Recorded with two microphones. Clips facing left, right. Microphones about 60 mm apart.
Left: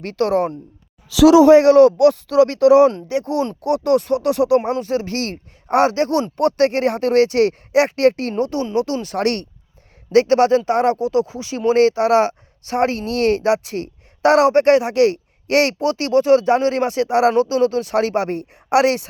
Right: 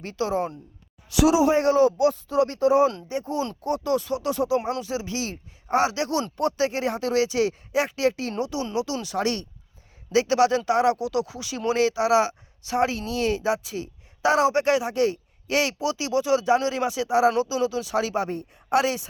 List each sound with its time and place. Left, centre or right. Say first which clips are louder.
0.0 s speech: left 8 dB; left
1.2 s speech: left 10 dB; left
3.6 s speech: left 9 dB; left
6.3 s speech: left 8 dB; left